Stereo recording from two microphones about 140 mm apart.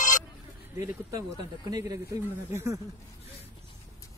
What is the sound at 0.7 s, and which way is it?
Speech, 25° right (ahead or behind).